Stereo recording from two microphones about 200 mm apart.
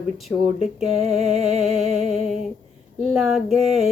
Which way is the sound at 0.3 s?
Centre (ahead or behind).